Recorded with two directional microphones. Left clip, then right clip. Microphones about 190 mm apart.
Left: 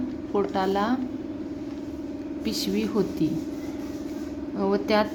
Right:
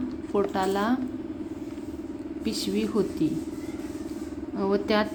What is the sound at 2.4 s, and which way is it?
Speech, 10° left (ahead or behind).